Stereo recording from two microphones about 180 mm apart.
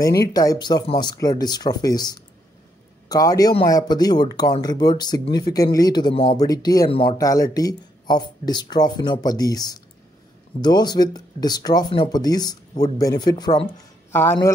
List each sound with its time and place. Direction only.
0.3 s speech: 20° left (ahead or behind)